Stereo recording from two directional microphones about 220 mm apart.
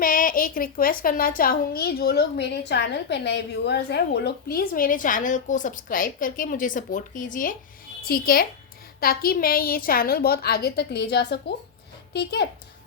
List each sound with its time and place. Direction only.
0.0 s a woman's voice: 40° left (ahead or behind)